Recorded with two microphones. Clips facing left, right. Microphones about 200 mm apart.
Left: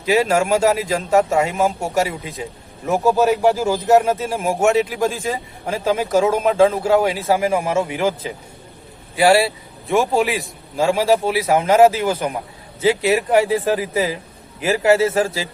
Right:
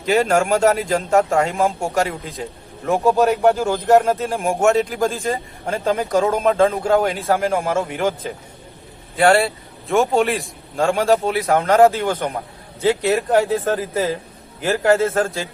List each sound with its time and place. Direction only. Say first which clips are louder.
0.0 s a man's voice: even; centre (ahead or behind)
9.1 s a man's voice: left 1 dB; 5° left (ahead or behind)